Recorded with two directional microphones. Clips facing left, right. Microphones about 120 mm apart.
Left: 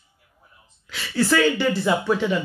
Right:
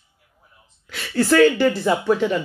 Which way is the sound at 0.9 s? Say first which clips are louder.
Right 3 dB; 50° right (ahead or behind).